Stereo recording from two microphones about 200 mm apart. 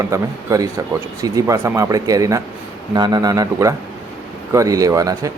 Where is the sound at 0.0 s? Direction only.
15° right (ahead or behind).